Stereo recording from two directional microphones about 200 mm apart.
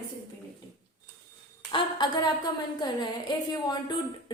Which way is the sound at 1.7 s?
20° left (ahead or behind).